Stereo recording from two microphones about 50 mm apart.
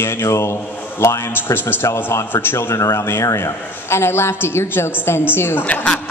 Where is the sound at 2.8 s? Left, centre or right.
Left.